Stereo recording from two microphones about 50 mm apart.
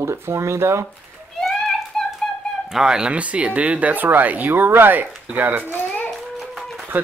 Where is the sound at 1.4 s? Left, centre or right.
Centre.